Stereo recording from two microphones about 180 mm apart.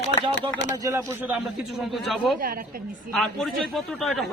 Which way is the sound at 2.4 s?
55° right (ahead or behind).